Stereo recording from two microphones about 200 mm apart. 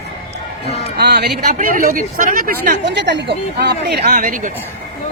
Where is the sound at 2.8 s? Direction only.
60° right (ahead or behind); by 4.5 s 40° right (ahead or behind).